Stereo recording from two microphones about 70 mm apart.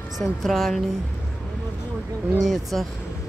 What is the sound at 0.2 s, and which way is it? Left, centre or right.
Speech, centre.